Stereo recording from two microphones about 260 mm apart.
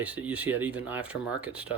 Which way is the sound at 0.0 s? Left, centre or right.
Centre.